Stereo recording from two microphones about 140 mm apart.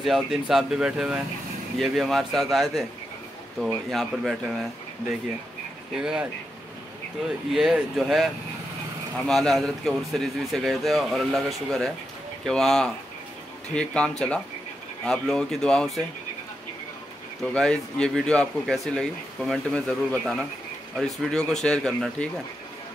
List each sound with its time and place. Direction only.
0.0 s speech: centre (ahead or behind)
5.9 s speech: 5° right (ahead or behind)
7.5 s speech: 5° right (ahead or behind)
17.6 s speech: 5° left (ahead or behind)